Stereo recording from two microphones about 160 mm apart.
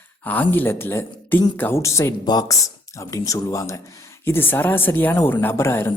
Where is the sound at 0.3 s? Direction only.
10° left (ahead or behind).